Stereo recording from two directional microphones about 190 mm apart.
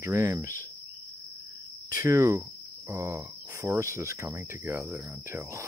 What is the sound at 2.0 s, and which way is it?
Speech, 15° right (ahead or behind).